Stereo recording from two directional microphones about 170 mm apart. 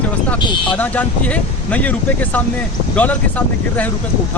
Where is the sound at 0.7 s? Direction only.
10° left (ahead or behind).